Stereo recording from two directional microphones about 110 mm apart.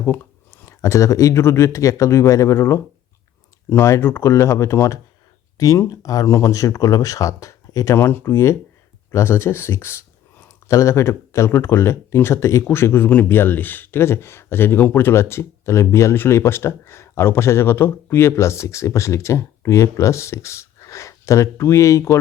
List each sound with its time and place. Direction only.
0.0 s speech: 20° left (ahead or behind)